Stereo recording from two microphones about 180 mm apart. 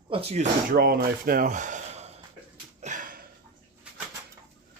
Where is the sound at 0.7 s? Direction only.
55° right (ahead or behind); by 2.2 s 40° right (ahead or behind).